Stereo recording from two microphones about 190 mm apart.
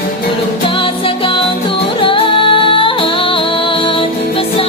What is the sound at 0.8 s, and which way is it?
Music, 25° left (ahead or behind).